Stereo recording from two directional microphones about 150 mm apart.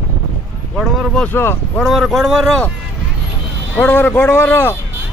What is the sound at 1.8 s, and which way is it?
Speech, centre (ahead or behind).